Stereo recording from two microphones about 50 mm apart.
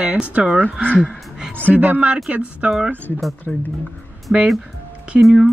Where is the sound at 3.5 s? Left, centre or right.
Centre.